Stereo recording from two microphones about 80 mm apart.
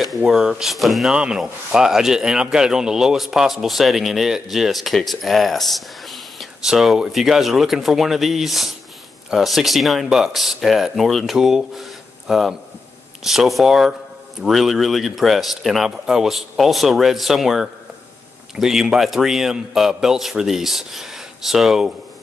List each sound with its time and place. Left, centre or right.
0.2 s speech: centre
1.1 s speech: centre